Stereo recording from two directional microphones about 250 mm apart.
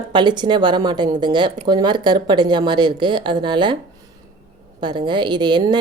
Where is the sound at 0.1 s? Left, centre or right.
Centre.